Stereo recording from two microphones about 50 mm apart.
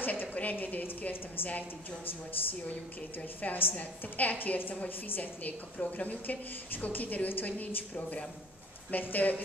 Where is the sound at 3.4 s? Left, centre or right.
Left.